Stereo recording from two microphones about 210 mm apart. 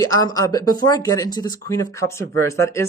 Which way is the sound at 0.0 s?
15° left (ahead or behind).